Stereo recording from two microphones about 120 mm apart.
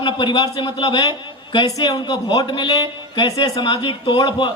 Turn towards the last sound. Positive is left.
turn(degrees=40)  # may be behind; listen again after turning